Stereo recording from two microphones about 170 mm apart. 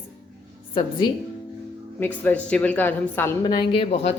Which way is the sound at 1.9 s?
10° left (ahead or behind).